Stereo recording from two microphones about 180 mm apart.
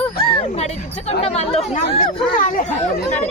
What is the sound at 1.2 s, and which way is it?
Speech, 35° left (ahead or behind).